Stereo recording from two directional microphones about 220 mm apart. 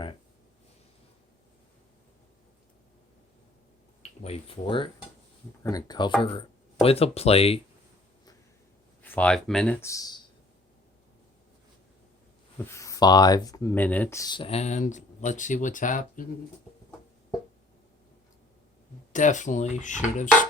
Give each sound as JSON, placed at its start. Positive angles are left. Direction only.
{"t": 4.2, "sound": "speech", "side_deg": 25}
{"t": 9.0, "sound": "speech", "side_deg": 5}
{"t": 12.6, "sound": "speech", "side_deg": 15}
{"t": 19.1, "sound": "speech", "side_deg": 35}